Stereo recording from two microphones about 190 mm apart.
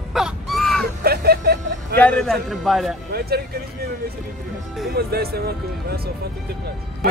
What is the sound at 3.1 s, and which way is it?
Speech, 55° right (ahead or behind).